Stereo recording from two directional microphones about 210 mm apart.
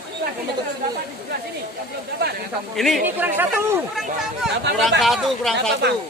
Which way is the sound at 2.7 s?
Centre (ahead or behind).